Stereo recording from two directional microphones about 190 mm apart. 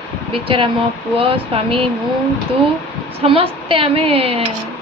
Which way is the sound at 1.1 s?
30° right (ahead or behind).